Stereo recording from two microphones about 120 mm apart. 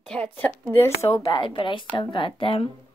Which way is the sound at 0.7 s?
20° left (ahead or behind).